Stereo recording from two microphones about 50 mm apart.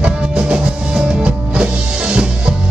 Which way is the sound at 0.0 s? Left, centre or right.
Right.